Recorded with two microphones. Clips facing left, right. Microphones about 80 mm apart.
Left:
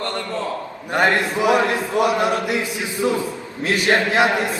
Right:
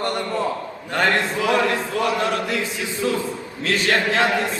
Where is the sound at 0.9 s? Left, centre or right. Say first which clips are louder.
Left 2 dB; left.